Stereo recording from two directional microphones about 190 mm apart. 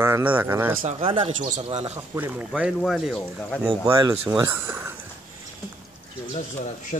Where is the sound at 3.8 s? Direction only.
15° right (ahead or behind).